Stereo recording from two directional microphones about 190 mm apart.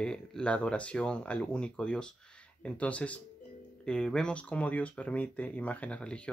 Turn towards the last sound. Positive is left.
turn(degrees=5)  # may be behind; listen again after turning